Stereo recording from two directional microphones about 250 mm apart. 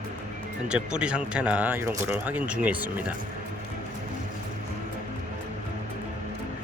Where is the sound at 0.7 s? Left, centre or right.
Centre.